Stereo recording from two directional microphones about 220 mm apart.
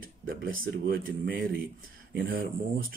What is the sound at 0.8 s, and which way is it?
Speech, 45° right (ahead or behind).